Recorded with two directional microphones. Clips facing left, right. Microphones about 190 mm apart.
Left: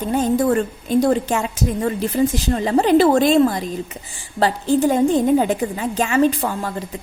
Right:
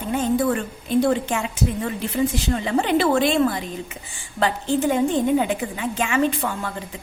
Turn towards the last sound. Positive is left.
turn(degrees=35)  # may be behind; listen again after turning